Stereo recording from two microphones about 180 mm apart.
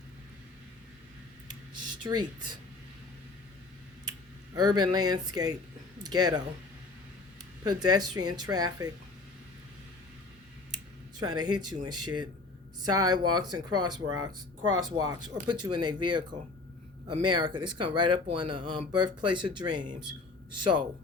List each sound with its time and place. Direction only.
2.0 s speech: 25° right (ahead or behind)
4.5 s speech: 25° right (ahead or behind)
7.6 s speech: 20° right (ahead or behind)
11.2 s speech: 25° right (ahead or behind)